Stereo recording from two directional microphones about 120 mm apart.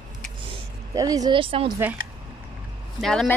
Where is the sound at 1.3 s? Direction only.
50° right (ahead or behind).